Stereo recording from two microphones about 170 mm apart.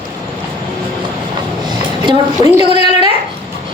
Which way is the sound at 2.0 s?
25° right (ahead or behind).